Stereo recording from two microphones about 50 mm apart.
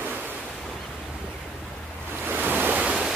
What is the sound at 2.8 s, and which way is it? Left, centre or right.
Waterfall, centre.